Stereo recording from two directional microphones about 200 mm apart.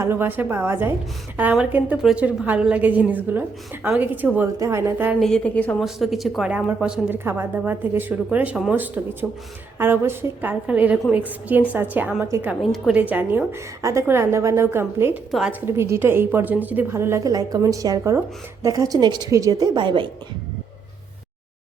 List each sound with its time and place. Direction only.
0.0 s a woman's voice: 10° right (ahead or behind)
5.2 s a woman's voice: 5° left (ahead or behind)
12.7 s a woman's voice: centre (ahead or behind); by 20.1 s 25° right (ahead or behind)